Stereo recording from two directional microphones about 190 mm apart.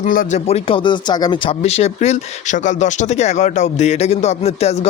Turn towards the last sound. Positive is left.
turn(degrees=35)  # may be behind; listen again after turning